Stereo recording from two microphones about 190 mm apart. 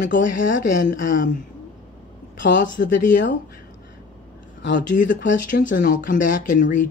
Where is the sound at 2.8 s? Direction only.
70° left (ahead or behind).